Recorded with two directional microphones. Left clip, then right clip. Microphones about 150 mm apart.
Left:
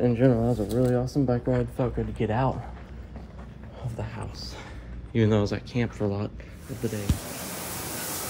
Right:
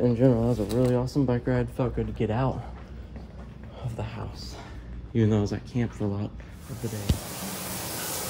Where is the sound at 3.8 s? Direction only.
Centre (ahead or behind).